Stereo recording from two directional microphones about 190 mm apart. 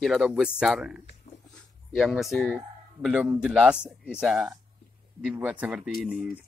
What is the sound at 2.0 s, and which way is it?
A man's voice, centre (ahead or behind).